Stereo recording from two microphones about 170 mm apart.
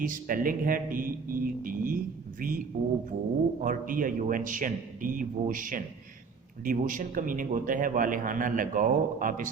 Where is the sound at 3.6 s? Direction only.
55° right (ahead or behind).